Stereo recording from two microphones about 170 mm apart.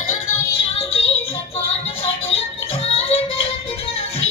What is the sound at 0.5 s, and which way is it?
Music, 35° left (ahead or behind).